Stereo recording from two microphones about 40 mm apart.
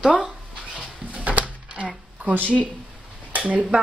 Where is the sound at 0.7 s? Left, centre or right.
Right.